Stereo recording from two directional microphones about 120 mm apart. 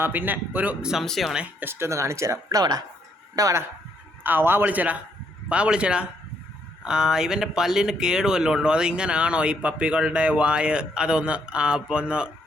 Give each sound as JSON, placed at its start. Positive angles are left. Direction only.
{"t": 0.0, "sound": "speech", "side_deg": -15}
{"t": 1.4, "sound": "speech", "side_deg": -15}
{"t": 4.2, "sound": "speech", "side_deg": -15}